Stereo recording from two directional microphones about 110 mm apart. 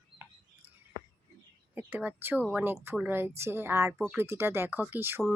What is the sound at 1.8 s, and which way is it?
Speech, 15° right (ahead or behind).